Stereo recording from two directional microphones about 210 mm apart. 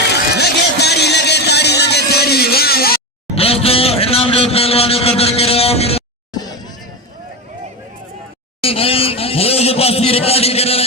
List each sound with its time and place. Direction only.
0.3 s a sound: 50° left (ahead or behind)
3.3 s vehicle: 25° left (ahead or behind)
8.6 s a man's voice: 25° left (ahead or behind)